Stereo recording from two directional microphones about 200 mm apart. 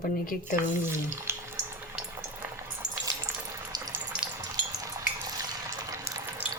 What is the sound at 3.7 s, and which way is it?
Frying, 20° right (ahead or behind).